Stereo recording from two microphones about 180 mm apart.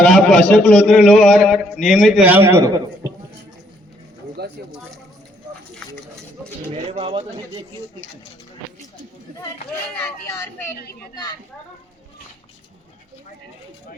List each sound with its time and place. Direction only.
0.0 s a man's voice: 5° left (ahead or behind); by 3.1 s 20° right (ahead or behind)
4.4 s bird: 65° right (ahead or behind)
5.8 s a sound: 5° left (ahead or behind)
6.7 s speech: 35° right (ahead or behind)
10.2 s a woman's voice: 15° left (ahead or behind)